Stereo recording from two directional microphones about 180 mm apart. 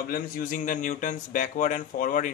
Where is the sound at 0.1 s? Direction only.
50° left (ahead or behind).